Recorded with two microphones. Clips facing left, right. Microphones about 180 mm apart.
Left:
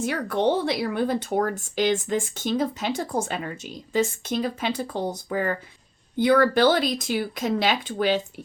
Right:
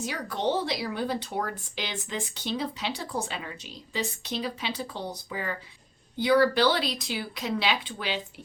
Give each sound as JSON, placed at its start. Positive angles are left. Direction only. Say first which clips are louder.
{"t": 0.0, "sound": "speech", "louder": "left 6 dB", "side_deg": 55}